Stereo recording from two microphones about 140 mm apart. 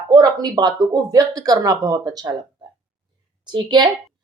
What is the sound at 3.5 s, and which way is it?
Speech, 30° right (ahead or behind).